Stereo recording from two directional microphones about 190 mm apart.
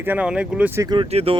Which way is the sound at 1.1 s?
30° right (ahead or behind).